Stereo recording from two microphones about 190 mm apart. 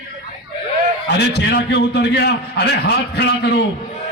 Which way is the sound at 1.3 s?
60° left (ahead or behind).